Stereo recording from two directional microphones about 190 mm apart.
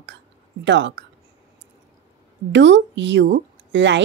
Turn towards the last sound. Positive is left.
turn(degrees=-70)  # may be behind; listen again after turning